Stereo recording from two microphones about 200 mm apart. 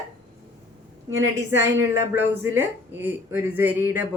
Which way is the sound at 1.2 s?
15° right (ahead or behind).